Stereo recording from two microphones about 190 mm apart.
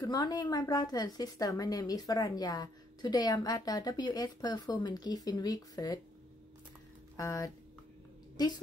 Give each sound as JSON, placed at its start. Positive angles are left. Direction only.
{"t": 0.0, "sound": "speech", "side_deg": 20}
{"t": 7.2, "sound": "speech", "side_deg": 15}